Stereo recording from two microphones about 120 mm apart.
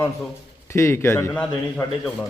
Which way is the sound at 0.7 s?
20° left (ahead or behind).